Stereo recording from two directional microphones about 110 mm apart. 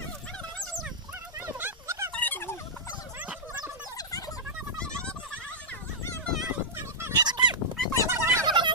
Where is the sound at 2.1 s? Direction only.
15° left (ahead or behind).